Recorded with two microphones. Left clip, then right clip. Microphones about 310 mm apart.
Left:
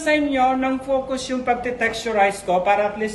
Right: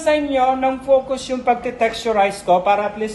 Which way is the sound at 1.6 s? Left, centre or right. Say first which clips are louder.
Right 3 dB; centre.